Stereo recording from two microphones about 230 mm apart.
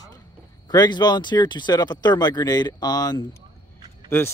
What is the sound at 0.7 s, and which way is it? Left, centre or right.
A man's voice, centre.